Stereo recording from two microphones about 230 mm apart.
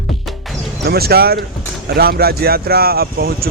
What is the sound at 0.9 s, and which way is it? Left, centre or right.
Speech, right.